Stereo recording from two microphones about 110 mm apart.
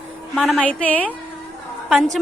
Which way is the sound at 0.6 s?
10° left (ahead or behind).